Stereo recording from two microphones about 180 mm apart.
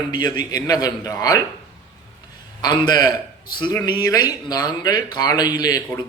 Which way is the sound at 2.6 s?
25° left (ahead or behind).